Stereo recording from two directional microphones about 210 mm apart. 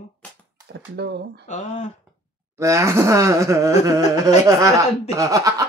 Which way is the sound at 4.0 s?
35° left (ahead or behind).